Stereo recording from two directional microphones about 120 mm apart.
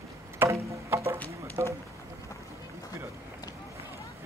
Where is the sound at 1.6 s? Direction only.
25° right (ahead or behind).